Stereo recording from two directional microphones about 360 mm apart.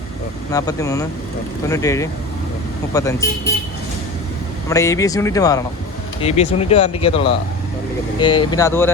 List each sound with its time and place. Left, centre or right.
0.5 s speech: centre
4.7 s speech: centre